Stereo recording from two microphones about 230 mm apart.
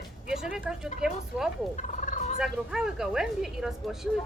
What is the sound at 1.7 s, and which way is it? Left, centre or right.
Fowl, left.